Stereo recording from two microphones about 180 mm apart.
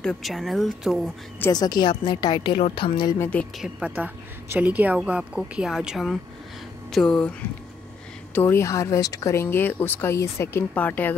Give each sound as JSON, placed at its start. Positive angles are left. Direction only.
{"t": 0.0, "sound": "speech", "side_deg": 5}
{"t": 1.4, "sound": "a woman's voice", "side_deg": 20}
{"t": 3.2, "sound": "speech", "side_deg": 5}
{"t": 3.6, "sound": "a woman's voice", "side_deg": -5}
{"t": 8.4, "sound": "speech", "side_deg": 15}